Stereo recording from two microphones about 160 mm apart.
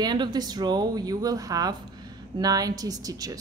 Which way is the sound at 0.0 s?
25° right (ahead or behind).